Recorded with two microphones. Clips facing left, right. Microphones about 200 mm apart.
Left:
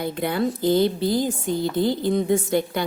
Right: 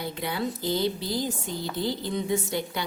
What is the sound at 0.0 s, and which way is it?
A woman's voice, 50° left (ahead or behind).